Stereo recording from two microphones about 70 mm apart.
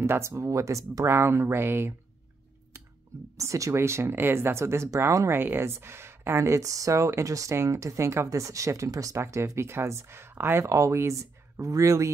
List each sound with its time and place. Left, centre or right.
0.0 s speech: right
0.3 s speech: right
3.3 s speech: right
5.3 s speech: right
10.6 s speech: right